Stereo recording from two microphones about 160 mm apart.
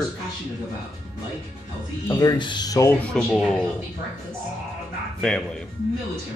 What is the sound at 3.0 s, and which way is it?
Speech, centre (ahead or behind).